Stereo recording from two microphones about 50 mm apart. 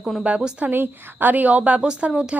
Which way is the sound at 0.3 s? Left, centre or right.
Centre.